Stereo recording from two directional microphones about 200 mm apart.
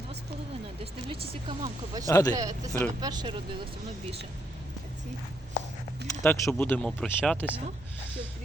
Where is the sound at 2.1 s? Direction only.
20° left (ahead or behind).